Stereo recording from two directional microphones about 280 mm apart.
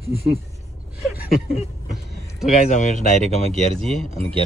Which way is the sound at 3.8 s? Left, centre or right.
Centre.